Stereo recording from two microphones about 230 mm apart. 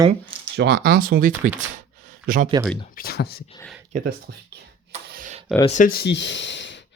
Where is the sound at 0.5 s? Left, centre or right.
Right.